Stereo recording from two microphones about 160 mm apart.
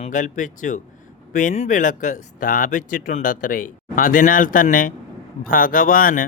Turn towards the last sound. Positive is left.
turn(degrees=60)  # may be behind; listen again after turning